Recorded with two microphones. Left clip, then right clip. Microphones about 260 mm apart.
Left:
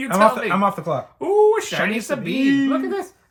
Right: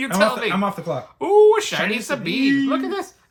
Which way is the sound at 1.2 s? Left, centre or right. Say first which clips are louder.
Right 3 dB; centre.